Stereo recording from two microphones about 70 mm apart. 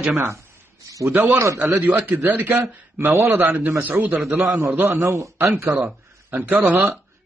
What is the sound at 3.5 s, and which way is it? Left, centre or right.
Speech, right.